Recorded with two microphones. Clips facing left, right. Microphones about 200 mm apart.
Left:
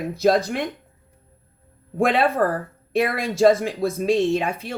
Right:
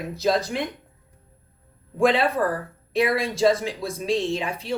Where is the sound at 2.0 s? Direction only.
55° left (ahead or behind).